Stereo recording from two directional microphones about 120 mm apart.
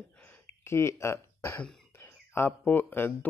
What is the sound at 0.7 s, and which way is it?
Speech, 20° left (ahead or behind).